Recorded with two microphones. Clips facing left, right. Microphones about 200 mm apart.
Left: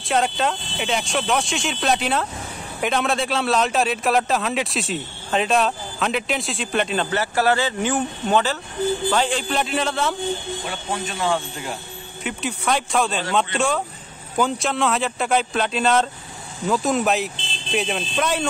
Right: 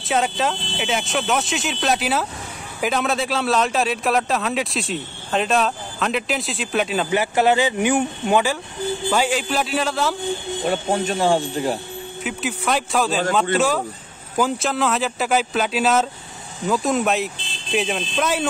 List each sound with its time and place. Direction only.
0.1 s speech: centre (ahead or behind)
7.2 s speech: 15° right (ahead or behind); by 10.1 s centre (ahead or behind)
10.6 s speech: 45° right (ahead or behind)
12.2 s speech: centre (ahead or behind)